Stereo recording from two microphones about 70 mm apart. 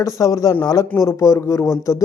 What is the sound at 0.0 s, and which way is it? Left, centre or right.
Speech, left.